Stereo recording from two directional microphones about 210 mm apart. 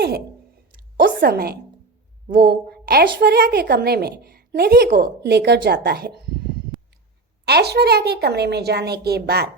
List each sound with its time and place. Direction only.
0.9 s a woman's voice: 45° right (ahead or behind)